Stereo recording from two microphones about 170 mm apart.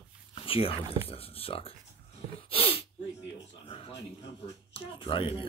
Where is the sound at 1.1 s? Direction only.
35° left (ahead or behind).